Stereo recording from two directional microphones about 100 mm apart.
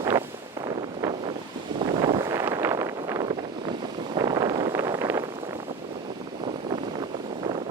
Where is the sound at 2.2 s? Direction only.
30° right (ahead or behind).